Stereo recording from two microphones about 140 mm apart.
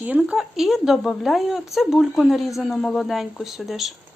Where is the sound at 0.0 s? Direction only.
10° right (ahead or behind).